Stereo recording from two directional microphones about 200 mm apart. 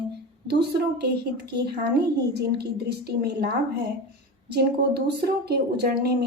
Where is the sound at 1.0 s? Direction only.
55° right (ahead or behind).